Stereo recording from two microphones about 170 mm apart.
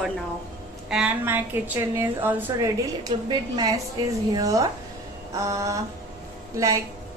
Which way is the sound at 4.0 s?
25° right (ahead or behind).